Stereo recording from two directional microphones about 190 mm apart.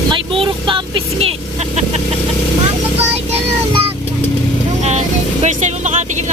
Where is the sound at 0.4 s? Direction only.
25° right (ahead or behind).